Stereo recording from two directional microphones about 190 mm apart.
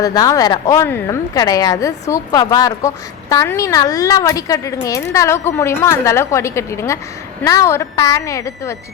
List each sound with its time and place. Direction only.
0.0 s a woman's voice: 20° left (ahead or behind)